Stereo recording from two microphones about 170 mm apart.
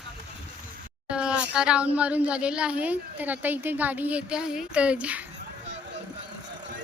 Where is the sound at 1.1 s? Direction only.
5° right (ahead or behind).